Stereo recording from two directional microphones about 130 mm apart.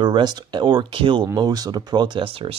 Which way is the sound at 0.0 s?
35° right (ahead or behind).